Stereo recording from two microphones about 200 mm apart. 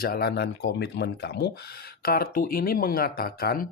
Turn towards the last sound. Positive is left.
turn(degrees=45)  # may be behind; listen again after turning